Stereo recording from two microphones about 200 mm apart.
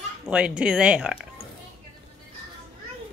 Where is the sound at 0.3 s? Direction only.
5° right (ahead or behind).